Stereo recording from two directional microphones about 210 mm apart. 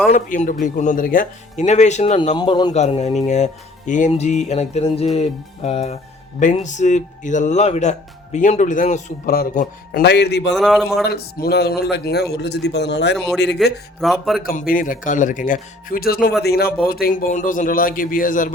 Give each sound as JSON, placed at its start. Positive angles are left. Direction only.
{"t": 0.1, "sound": "speech", "side_deg": 40}
{"t": 2.3, "sound": "music", "side_deg": 20}
{"t": 3.2, "sound": "speech", "side_deg": 35}
{"t": 5.1, "sound": "music", "side_deg": 30}
{"t": 6.4, "sound": "speech", "side_deg": 35}
{"t": 10.5, "sound": "speech", "side_deg": 0}
{"t": 11.0, "sound": "a man's voice", "side_deg": 50}
{"t": 13.6, "sound": "speech", "side_deg": 0}
{"t": 14.7, "sound": "speech", "side_deg": 40}